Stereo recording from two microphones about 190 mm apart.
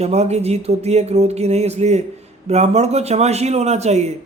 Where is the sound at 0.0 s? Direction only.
35° right (ahead or behind).